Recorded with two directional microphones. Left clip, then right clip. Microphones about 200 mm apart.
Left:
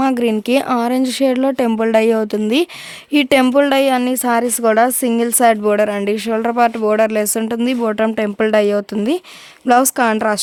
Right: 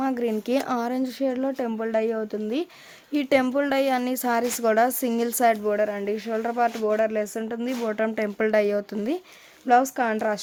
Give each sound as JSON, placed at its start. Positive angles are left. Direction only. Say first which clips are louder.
{"t": 0.0, "sound": "speech", "louder": "left 9 dB", "side_deg": 45}